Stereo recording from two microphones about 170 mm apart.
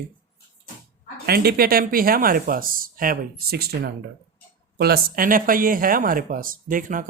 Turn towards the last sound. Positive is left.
turn(degrees=-50)  # may be behind; listen again after turning